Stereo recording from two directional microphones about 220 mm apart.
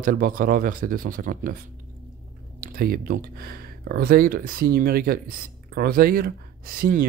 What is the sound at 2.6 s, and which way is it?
Speech, 40° right (ahead or behind).